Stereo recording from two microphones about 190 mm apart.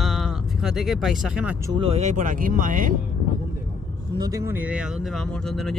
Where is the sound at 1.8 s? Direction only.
35° right (ahead or behind).